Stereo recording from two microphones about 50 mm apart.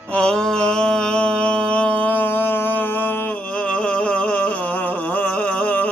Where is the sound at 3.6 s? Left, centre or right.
Left.